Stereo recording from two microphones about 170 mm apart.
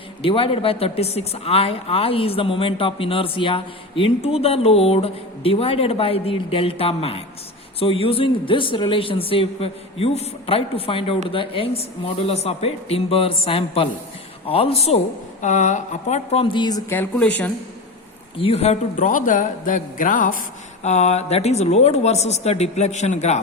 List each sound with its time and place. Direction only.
0.2 s speech: 30° left (ahead or behind)
16.9 s speech: 10° left (ahead or behind)
18.3 s a man's voice: 35° left (ahead or behind)